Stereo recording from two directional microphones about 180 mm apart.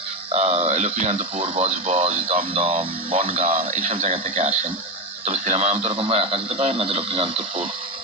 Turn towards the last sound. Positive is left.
turn(degrees=-30)  # may be behind; listen again after turning